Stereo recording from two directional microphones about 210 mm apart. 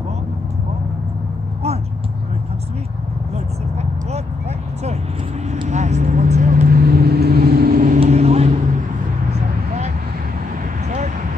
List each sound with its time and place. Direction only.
5.5 s vehicle: 35° right (ahead or behind)